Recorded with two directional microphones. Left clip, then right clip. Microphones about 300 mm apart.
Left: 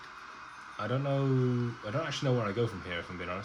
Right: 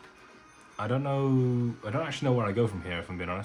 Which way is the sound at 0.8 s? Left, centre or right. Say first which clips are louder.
Right 3 dB; right.